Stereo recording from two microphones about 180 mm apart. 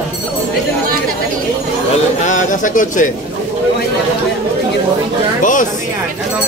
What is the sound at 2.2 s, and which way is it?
Speech, 45° left (ahead or behind).